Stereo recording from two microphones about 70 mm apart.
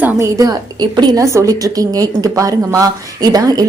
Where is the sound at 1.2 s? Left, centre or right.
Right.